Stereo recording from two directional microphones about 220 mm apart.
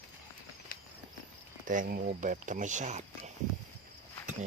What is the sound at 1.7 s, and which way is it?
Speech, 40° right (ahead or behind).